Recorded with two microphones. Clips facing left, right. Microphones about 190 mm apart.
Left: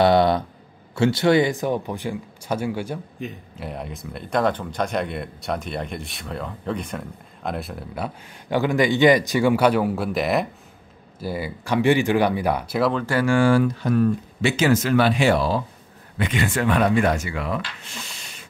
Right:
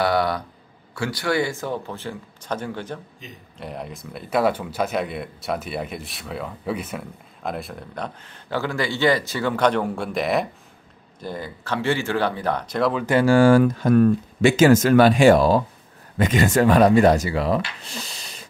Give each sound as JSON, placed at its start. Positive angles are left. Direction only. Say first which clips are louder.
{"t": 0.0, "sound": "speech", "louder": "left 5 dB", "side_deg": 25}
{"t": 3.2, "sound": "speech", "louder": "left 10 dB", "side_deg": 55}
{"t": 3.5, "sound": "speech", "louder": "left 1 dB", "side_deg": 0}
{"t": 13.2, "sound": "speech", "louder": "right 4 dB", "side_deg": -40}